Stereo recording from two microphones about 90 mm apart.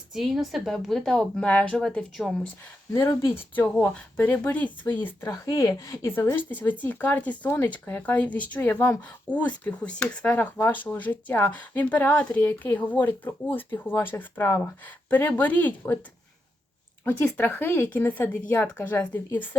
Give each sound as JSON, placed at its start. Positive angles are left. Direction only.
{"t": 0.1, "sound": "a woman's voice", "side_deg": -5}
{"t": 2.2, "sound": "a woman's voice", "side_deg": 0}
{"t": 3.0, "sound": "speech", "side_deg": 35}
{"t": 3.3, "sound": "speech", "side_deg": 20}
{"t": 5.2, "sound": "speech", "side_deg": 35}
{"t": 17.0, "sound": "speech", "side_deg": 20}